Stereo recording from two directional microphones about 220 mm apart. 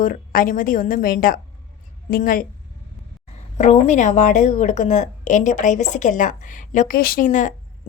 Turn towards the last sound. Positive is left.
turn(degrees=35)  # may be behind; listen again after turning